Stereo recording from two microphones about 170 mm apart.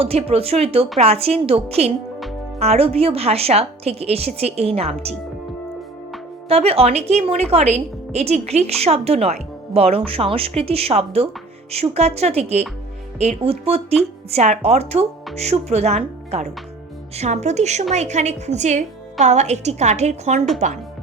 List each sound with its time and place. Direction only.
0.0 s a woman's voice: 35° right (ahead or behind)
6.5 s a woman's voice: 35° right (ahead or behind)